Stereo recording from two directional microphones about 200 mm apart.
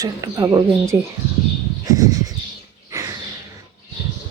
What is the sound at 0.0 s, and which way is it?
Speech, 15° right (ahead or behind).